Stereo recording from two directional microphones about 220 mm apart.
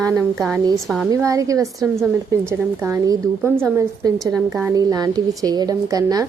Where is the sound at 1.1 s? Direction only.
15° right (ahead or behind).